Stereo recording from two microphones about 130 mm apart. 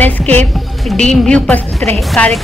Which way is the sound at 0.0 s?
15° left (ahead or behind).